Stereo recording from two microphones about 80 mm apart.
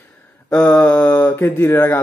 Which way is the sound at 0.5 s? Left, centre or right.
Centre.